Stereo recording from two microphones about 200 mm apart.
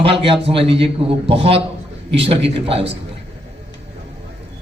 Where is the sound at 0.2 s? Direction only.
25° right (ahead or behind).